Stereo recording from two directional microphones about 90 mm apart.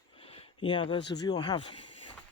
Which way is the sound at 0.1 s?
90° left.